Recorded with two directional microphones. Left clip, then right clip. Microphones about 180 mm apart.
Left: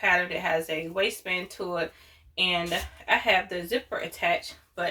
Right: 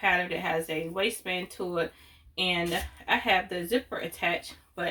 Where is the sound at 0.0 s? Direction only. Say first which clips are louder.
Left 2 dB; 5° left (ahead or behind).